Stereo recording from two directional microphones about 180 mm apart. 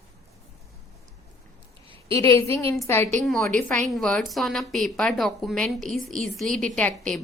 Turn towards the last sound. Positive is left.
turn(degrees=5)  # may be behind; listen again after turning